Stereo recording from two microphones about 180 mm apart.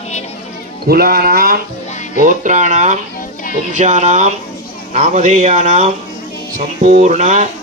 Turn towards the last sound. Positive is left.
turn(degrees=-40)  # may be behind; listen again after turning